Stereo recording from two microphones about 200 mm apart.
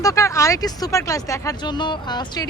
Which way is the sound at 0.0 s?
15° left (ahead or behind).